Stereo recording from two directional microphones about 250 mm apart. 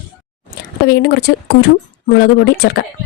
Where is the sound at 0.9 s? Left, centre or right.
Left.